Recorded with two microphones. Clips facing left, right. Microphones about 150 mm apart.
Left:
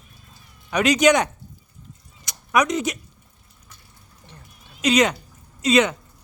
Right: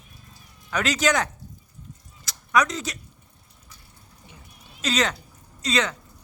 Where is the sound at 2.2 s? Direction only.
20° left (ahead or behind).